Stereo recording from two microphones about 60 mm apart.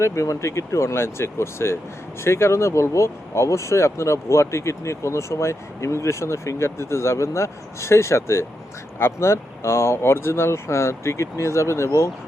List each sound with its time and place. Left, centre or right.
0.0 s speech: left